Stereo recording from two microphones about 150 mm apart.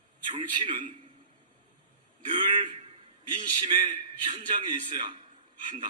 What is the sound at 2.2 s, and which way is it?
Speech, 35° right (ahead or behind).